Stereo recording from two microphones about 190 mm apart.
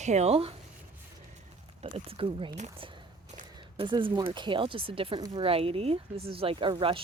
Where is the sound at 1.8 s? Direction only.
30° right (ahead or behind).